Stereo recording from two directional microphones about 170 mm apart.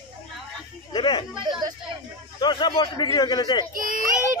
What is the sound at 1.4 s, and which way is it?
Speech, 25° right (ahead or behind).